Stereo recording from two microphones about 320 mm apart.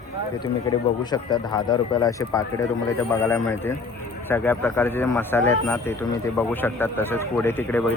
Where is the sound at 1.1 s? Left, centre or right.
Centre.